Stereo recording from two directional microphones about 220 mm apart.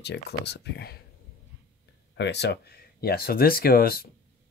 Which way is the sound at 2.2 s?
50° left (ahead or behind).